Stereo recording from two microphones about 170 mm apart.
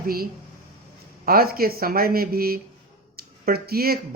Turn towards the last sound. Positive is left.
turn(degrees=-65)  # may be behind; listen again after turning